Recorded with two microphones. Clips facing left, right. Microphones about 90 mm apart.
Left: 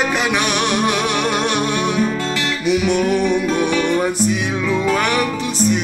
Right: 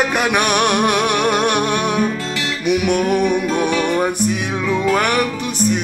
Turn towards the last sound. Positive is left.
turn(degrees=-50)  # may be behind; listen again after turning